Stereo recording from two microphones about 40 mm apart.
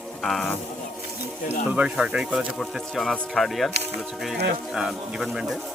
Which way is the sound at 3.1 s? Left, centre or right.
Centre.